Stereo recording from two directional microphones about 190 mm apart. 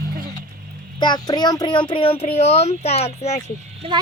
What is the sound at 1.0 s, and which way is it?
Speech, 20° left (ahead or behind).